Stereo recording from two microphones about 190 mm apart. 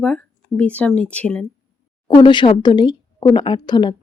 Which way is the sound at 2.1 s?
25° left (ahead or behind).